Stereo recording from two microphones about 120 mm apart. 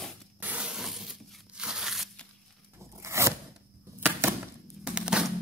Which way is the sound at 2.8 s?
25° right (ahead or behind).